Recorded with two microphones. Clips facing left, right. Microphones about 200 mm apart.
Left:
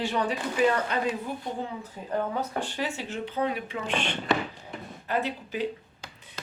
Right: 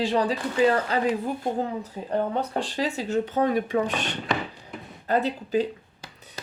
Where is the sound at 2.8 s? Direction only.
40° right (ahead or behind).